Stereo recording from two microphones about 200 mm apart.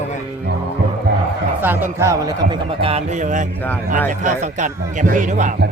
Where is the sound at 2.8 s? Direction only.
30° right (ahead or behind).